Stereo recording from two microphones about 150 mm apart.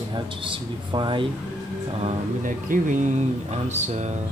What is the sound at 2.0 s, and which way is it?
Speech, 60° right (ahead or behind).